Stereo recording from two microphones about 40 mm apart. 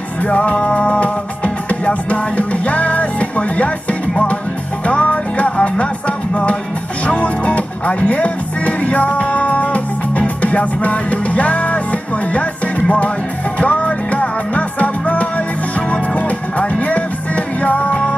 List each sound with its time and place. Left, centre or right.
0.2 s music: left
4.8 s music: left